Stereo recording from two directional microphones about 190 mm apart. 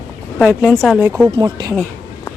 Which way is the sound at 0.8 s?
5° right (ahead or behind).